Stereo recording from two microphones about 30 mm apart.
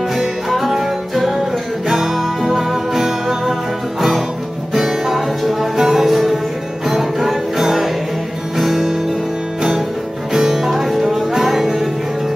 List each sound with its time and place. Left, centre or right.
0.5 s music: centre
4.7 s music: centre
10.3 s music: centre